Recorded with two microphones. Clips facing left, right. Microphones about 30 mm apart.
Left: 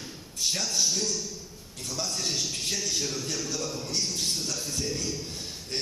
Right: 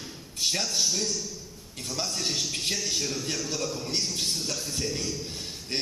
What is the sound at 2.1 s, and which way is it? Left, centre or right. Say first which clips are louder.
Music: right 1 dB; centre.